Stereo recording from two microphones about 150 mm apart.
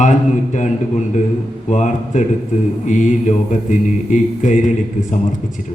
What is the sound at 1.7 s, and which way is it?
A man's voice, 55° left (ahead or behind).